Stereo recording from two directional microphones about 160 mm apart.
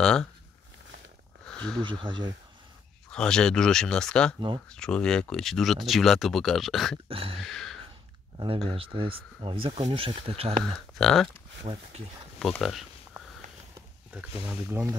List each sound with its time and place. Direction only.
0.0 s speech: 5° left (ahead or behind)
1.4 s a sound: 5° left (ahead or behind)
1.8 s speech: 30° right (ahead or behind)
3.1 s speech: 5° left (ahead or behind)
7.1 s speech: 35° right (ahead or behind)
7.4 s a sound: 5° left (ahead or behind)
8.6 s speech: 35° right (ahead or behind)
10.6 s speech: centre (ahead or behind)
11.6 s speech: 35° right (ahead or behind)
12.4 s speech: centre (ahead or behind)
14.1 s speech: 15° right (ahead or behind)